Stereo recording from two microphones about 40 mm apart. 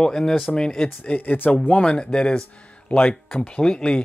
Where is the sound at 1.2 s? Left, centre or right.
Left.